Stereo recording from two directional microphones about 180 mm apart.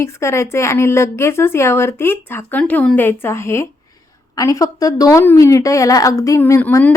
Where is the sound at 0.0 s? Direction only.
15° left (ahead or behind).